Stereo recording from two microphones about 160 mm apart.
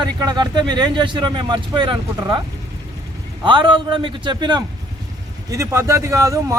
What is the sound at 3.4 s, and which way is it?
A man's voice, 30° right (ahead or behind).